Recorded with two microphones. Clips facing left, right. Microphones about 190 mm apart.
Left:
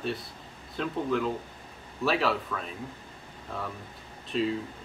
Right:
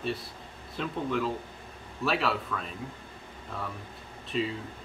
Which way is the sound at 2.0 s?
Centre (ahead or behind).